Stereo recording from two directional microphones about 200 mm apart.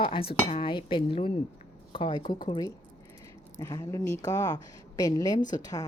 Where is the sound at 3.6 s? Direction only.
20° left (ahead or behind).